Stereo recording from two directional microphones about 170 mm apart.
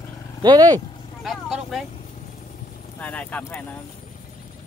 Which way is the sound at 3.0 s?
10° left (ahead or behind).